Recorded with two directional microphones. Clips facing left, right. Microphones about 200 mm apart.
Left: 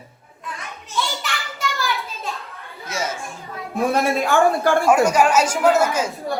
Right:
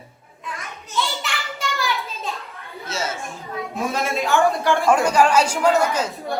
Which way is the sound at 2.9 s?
15° left (ahead or behind).